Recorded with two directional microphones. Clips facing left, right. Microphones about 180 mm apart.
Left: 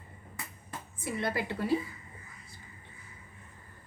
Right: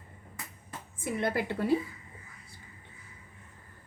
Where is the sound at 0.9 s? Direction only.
50° right (ahead or behind).